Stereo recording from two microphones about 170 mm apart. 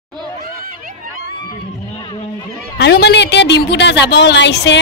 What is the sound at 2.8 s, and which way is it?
A woman's voice, 75° left (ahead or behind).